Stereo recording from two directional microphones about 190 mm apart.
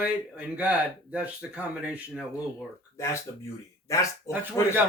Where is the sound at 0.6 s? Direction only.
10° right (ahead or behind).